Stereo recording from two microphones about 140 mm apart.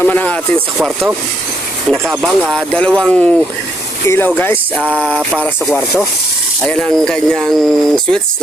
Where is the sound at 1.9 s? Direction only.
Centre (ahead or behind); by 4.3 s 15° left (ahead or behind).